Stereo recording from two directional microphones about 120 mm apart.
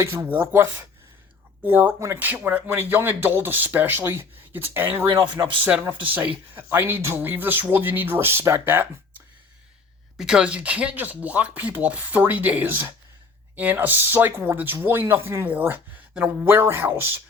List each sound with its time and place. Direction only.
0.0 s speech: 20° right (ahead or behind)
5.3 s speech: 40° right (ahead or behind)
5.6 s speech: 15° right (ahead or behind)
10.2 s speech: 5° right (ahead or behind)